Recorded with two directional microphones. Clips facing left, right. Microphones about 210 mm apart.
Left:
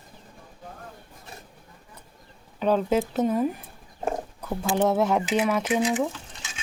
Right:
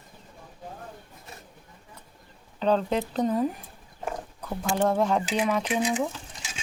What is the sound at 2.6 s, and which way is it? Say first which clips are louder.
A woman's voice: left 2 dB; 5° left (ahead or behind).